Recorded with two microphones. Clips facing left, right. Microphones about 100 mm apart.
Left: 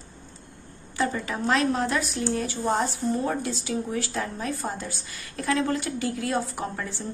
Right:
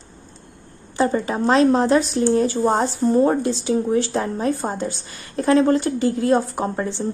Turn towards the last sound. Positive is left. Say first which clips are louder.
# right 8 dB
turn(degrees=-30)  # may be behind; listen again after turning